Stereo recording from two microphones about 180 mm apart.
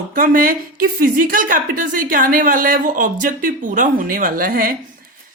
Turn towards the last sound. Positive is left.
turn(degrees=-50)  # may be behind; listen again after turning